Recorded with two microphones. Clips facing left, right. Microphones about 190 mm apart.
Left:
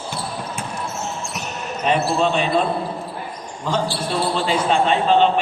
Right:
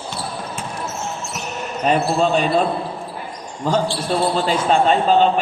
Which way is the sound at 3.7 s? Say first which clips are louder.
Right 3 dB; 40° right (ahead or behind).